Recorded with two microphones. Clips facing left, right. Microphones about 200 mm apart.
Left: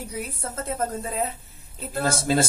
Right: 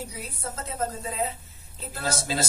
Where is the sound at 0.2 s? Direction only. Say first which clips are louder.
Left 4 dB; 55° left (ahead or behind).